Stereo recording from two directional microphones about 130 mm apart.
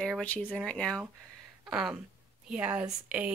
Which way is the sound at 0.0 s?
10° left (ahead or behind).